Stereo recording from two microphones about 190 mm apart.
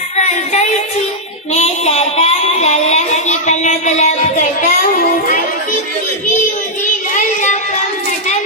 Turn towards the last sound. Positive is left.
turn(degrees=40)  # may be behind; listen again after turning